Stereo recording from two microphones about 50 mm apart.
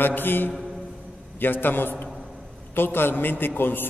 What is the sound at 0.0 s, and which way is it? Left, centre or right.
A man's voice, left.